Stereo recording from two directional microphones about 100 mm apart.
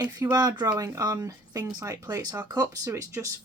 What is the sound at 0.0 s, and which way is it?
Speech, 35° right (ahead or behind).